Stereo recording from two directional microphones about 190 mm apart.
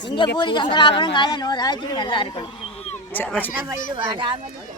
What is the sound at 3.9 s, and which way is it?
Speech, 25° right (ahead or behind).